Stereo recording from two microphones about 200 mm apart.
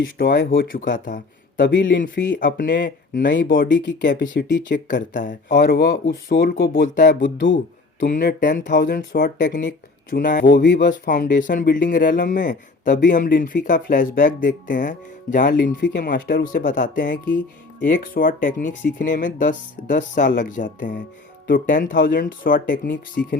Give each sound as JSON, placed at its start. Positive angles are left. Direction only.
{"t": 0.2, "sound": "speech", "side_deg": 60}
{"t": 0.7, "sound": "speech", "side_deg": 40}
{"t": 4.0, "sound": "speech", "side_deg": 60}
{"t": 5.1, "sound": "speech", "side_deg": 40}
{"t": 7.2, "sound": "speech", "side_deg": 70}
{"t": 8.1, "sound": "speech", "side_deg": 45}
{"t": 15.8, "sound": "speech", "side_deg": 55}
{"t": 16.6, "sound": "speech", "side_deg": 40}